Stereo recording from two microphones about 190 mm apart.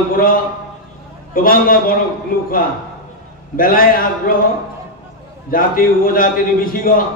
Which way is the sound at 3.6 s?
50° left (ahead or behind).